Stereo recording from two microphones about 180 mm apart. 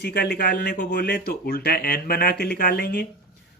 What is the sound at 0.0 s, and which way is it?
Speech, 65° left (ahead or behind).